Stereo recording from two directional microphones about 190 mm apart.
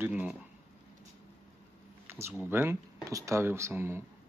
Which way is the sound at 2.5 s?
15° right (ahead or behind).